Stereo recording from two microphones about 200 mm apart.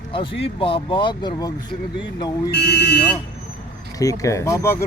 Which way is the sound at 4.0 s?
15° left (ahead or behind).